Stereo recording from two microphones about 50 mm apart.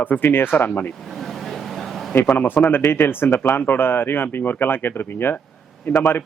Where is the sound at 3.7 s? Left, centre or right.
Left.